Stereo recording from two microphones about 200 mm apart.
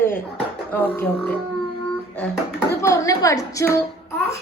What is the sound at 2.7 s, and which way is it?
A woman's voice, 15° left (ahead or behind).